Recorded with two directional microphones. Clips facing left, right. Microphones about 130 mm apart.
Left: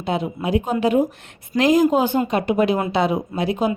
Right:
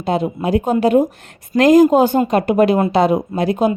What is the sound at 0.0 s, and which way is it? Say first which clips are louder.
A woman's voice: right 5 dB; 40° right (ahead or behind).